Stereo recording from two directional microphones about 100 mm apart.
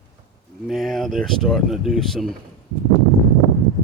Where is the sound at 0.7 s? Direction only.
Centre (ahead or behind).